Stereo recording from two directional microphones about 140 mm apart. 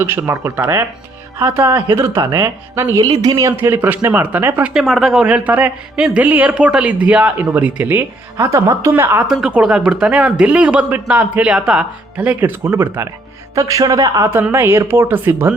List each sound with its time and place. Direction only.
0.0 s a woman's voice: 15° right (ahead or behind)
1.4 s a woman's voice: 25° right (ahead or behind)
2.3 s a woman's voice: 20° right (ahead or behind)
3.5 s a woman's voice: 15° right (ahead or behind)
4.7 s a woman's voice: centre (ahead or behind); by 15.5 s 15° right (ahead or behind)